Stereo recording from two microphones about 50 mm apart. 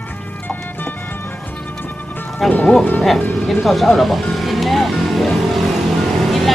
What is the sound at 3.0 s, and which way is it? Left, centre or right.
Music, centre.